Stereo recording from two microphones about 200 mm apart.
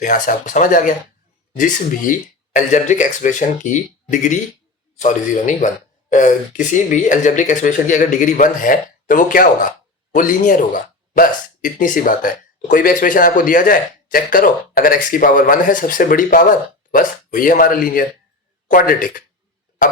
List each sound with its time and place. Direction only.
0.0 s speech: 40° left (ahead or behind)